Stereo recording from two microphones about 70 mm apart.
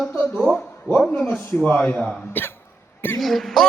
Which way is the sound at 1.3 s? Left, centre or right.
Centre.